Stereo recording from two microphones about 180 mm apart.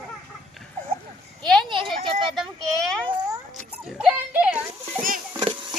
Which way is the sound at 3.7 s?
5° right (ahead or behind).